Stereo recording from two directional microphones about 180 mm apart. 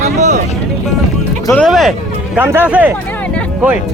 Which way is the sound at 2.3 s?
10° right (ahead or behind).